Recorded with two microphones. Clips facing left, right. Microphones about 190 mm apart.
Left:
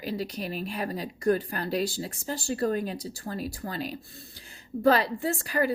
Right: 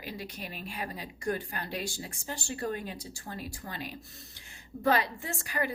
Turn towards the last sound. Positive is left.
turn(degrees=35)  # may be behind; listen again after turning